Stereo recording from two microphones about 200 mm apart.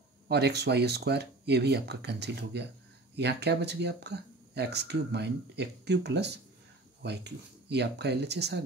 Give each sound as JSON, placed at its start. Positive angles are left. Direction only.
{"t": 0.3, "sound": "speech", "side_deg": -55}